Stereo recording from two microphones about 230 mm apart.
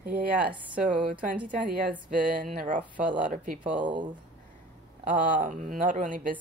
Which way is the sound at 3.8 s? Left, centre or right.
Centre.